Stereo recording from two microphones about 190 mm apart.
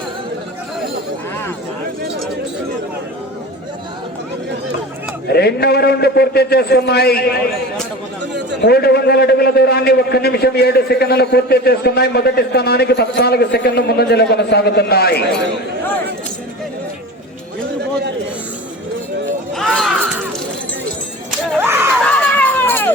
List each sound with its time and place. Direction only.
5.3 s a man's voice: 60° left (ahead or behind)
8.6 s a man's voice: 55° left (ahead or behind)
19.5 s shatter: centre (ahead or behind)
21.2 s a sound: 10° right (ahead or behind)
22.0 s run: 5° left (ahead or behind)